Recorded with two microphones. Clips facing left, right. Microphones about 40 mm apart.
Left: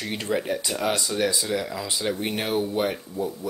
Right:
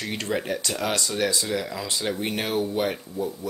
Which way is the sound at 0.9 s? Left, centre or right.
Centre.